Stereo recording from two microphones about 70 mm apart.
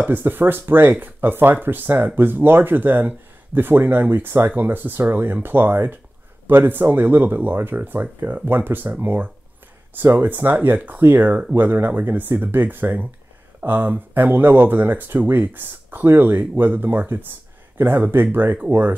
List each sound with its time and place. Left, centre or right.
0.0 s speech: right